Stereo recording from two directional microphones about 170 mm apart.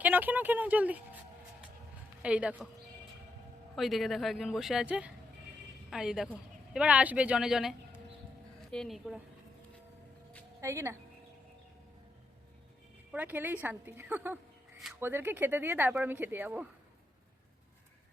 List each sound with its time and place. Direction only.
0.0 s speech: 10° right (ahead or behind)
2.2 s speech: 5° right (ahead or behind)
3.8 s a woman's voice: centre (ahead or behind)
10.6 s speech: 15° right (ahead or behind)
13.1 s speech: 10° right (ahead or behind)